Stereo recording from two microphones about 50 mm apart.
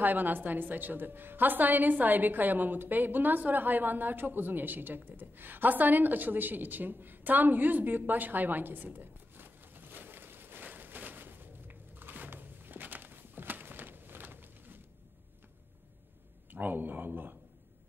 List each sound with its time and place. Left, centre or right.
0.0 s a woman's voice: right
16.5 s speech: right